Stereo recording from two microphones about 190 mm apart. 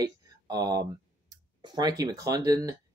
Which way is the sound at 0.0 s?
20° right (ahead or behind).